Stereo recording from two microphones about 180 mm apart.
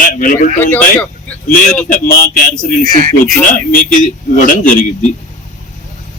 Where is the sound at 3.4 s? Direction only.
50° left (ahead or behind).